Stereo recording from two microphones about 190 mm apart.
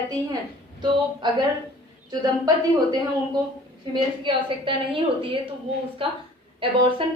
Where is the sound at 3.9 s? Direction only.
25° right (ahead or behind).